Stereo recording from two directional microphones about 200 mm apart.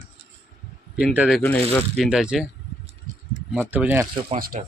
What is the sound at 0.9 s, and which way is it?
Speech, 5° right (ahead or behind).